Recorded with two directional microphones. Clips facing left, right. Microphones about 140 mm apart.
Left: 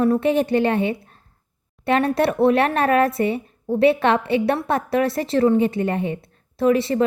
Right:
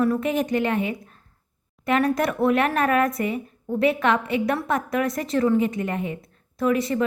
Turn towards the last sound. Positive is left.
turn(degrees=30)  # may be behind; listen again after turning